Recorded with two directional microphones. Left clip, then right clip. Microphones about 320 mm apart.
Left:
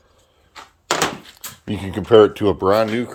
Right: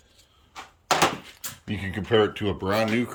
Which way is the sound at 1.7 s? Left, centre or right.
Centre.